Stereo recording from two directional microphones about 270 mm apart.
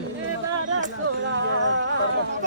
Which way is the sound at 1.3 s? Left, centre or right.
Right.